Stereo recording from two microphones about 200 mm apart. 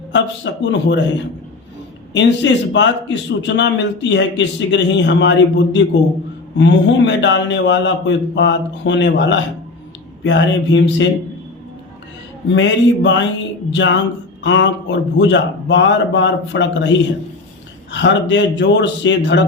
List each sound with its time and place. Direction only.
0.1 s a man's voice: 65° left (ahead or behind)
2.1 s a man's voice: 65° left (ahead or behind)
12.5 s a man's voice: 65° left (ahead or behind)